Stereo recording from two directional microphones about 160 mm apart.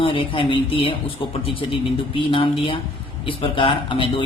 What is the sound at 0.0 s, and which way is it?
Speech, 35° left (ahead or behind).